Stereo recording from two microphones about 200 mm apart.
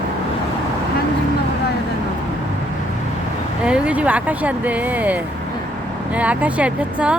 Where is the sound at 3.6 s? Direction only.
5° right (ahead or behind).